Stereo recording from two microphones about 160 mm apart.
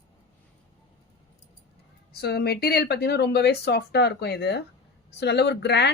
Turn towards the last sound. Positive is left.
turn(degrees=90)